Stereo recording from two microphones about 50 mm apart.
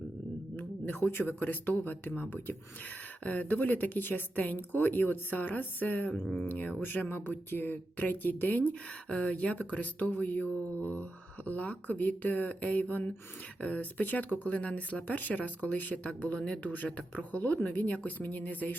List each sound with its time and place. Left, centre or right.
0.5 s speech: left
9.0 s speech: left